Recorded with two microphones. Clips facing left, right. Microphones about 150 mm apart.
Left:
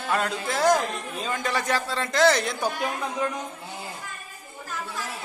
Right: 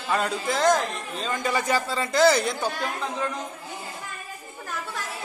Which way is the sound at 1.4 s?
Centre (ahead or behind).